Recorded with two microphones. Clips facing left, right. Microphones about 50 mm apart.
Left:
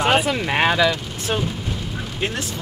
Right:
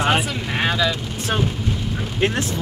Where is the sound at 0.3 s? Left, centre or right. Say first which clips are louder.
Left 4 dB; left.